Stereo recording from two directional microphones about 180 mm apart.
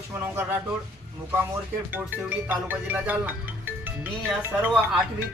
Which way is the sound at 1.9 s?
10° right (ahead or behind).